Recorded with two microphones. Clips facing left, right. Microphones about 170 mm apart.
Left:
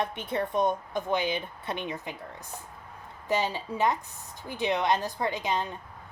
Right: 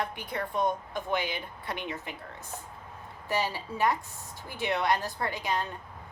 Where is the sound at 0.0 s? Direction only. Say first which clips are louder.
Left 4 dB; 20° left (ahead or behind).